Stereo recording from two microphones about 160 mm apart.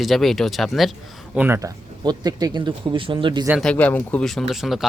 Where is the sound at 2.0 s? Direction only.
25° right (ahead or behind).